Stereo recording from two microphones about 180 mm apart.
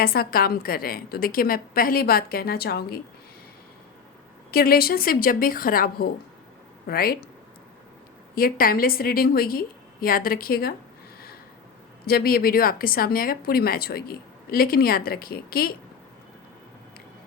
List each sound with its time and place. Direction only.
0.0 s speech: 55° left (ahead or behind)
4.5 s a woman's voice: 55° left (ahead or behind)
8.4 s speech: 55° left (ahead or behind)
12.0 s speech: 55° left (ahead or behind)